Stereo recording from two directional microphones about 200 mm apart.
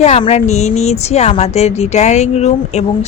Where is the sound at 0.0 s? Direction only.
35° left (ahead or behind).